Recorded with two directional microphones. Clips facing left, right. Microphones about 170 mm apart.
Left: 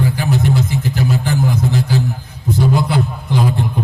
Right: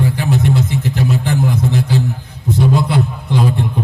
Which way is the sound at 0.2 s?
25° right (ahead or behind).